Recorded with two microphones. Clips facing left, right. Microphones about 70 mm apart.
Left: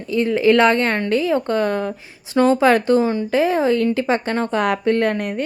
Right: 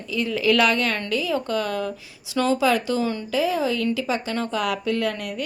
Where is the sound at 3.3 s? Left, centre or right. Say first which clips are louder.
Left 5 dB; left.